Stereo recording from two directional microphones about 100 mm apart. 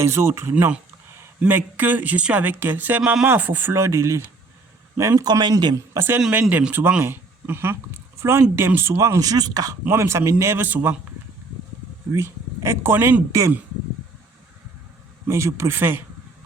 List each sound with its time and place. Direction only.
0.0 s speech: 25° right (ahead or behind)
5.2 s speech: 45° right (ahead or behind)
5.7 s speech: 30° right (ahead or behind)
9.8 s speech: 25° right (ahead or behind)
12.1 s speech: 25° right (ahead or behind)
15.3 s speech: 30° right (ahead or behind)